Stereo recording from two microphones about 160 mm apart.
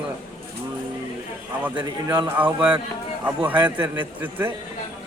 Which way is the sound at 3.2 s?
10° right (ahead or behind).